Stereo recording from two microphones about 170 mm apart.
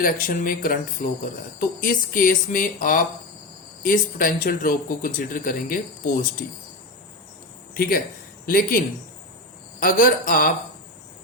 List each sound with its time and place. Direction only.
0.0 s speech: 55° left (ahead or behind)
7.7 s speech: 60° left (ahead or behind)
9.8 s speech: 55° left (ahead or behind)